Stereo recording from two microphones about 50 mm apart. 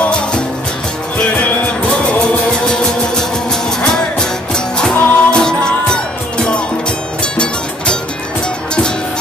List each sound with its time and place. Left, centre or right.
0.0 s music: centre